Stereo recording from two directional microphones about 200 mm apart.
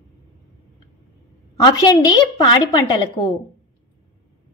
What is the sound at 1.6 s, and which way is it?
A woman's voice, 20° left (ahead or behind).